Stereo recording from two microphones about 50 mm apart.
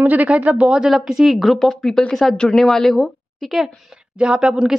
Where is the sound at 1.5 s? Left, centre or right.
Centre.